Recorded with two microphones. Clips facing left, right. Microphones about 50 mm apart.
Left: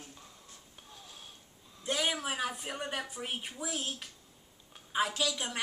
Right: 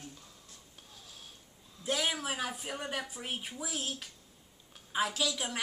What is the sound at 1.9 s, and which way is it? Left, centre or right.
A woman's voice, centre.